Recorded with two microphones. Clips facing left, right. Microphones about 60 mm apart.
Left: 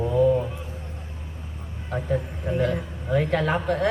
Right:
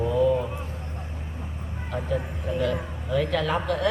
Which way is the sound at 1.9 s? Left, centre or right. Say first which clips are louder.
Left 2 dB; left.